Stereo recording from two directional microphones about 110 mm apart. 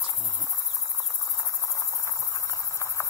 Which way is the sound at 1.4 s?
25° left (ahead or behind).